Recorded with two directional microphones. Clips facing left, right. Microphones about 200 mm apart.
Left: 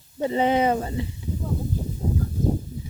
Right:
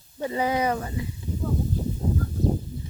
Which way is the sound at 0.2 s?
25° left (ahead or behind).